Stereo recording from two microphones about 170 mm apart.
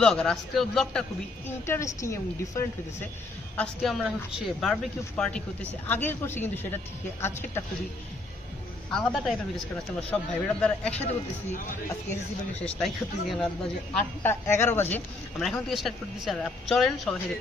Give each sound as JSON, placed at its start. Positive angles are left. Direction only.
{"t": 0.0, "sound": "speech", "side_deg": 5}
{"t": 1.5, "sound": "a woman's voice", "side_deg": 15}
{"t": 3.5, "sound": "a woman's voice", "side_deg": 5}
{"t": 8.9, "sound": "a woman's voice", "side_deg": 0}
{"t": 12.6, "sound": "a woman's voice", "side_deg": 5}
{"t": 15.3, "sound": "speech", "side_deg": 0}